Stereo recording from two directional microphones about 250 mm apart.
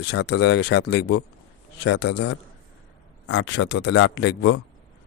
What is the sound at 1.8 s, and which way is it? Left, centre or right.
Speech, left.